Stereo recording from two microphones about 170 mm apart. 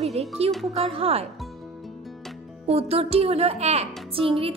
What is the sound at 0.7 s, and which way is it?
Speech, 35° right (ahead or behind).